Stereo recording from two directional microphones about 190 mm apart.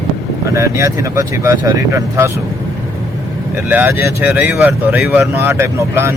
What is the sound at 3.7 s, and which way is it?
Speech, 10° right (ahead or behind).